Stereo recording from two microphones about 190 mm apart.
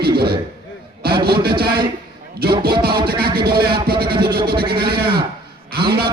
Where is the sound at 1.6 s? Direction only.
55° right (ahead or behind).